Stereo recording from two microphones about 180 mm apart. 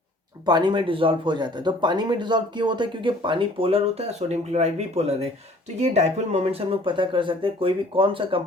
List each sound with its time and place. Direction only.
0.4 s speech: 25° right (ahead or behind)